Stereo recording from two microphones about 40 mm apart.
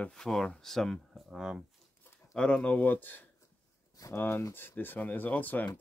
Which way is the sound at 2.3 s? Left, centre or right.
Left.